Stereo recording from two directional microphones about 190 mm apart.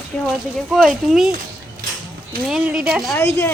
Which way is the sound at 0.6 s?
Centre (ahead or behind).